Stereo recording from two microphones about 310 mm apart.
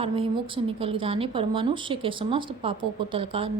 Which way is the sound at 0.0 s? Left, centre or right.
Centre.